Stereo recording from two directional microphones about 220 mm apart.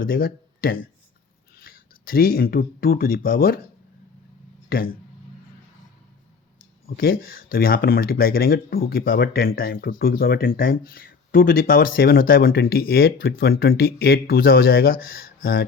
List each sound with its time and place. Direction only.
0.0 s speech: 40° left (ahead or behind)
4.7 s speech: 45° left (ahead or behind)
6.8 s speech: 45° left (ahead or behind)